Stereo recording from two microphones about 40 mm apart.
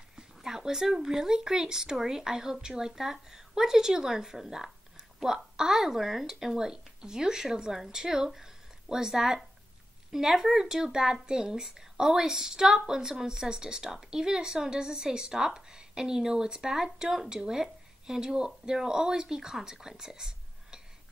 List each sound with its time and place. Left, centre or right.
0.4 s speech: centre